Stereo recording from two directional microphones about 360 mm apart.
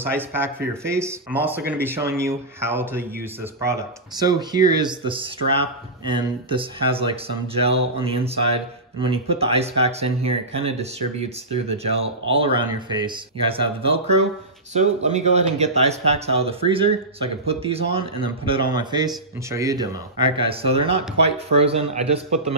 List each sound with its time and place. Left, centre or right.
0.0 s speech: centre